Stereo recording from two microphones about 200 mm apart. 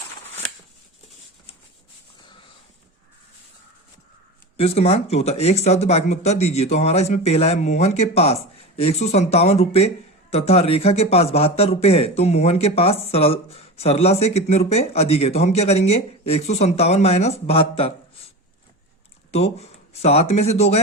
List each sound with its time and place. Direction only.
4.5 s speech: 30° left (ahead or behind)
19.3 s speech: 30° left (ahead or behind)